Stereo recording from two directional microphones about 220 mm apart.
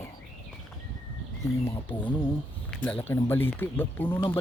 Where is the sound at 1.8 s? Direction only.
5° left (ahead or behind).